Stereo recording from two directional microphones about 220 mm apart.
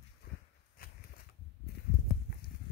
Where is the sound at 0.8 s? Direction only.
45° left (ahead or behind).